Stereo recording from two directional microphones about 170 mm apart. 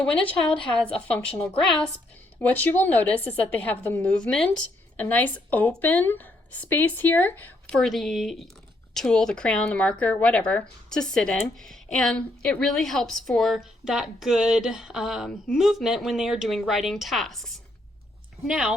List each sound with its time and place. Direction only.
0.5 s a woman's voice: 30° left (ahead or behind)
1.1 s a woman's voice: 5° left (ahead or behind)